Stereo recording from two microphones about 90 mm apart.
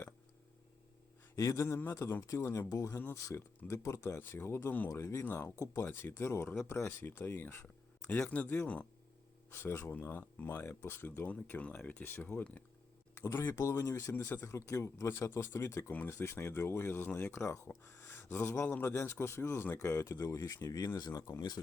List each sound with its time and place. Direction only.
1.4 s speech: 35° left (ahead or behind)
3.3 s speech: 25° left (ahead or behind)
4.9 s speech: 35° left (ahead or behind)
5.2 s speech: 20° left (ahead or behind)
13.1 s speech: 35° left (ahead or behind)
20.0 s speech: 35° left (ahead or behind)